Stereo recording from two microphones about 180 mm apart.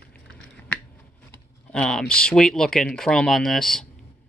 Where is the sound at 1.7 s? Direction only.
5° left (ahead or behind).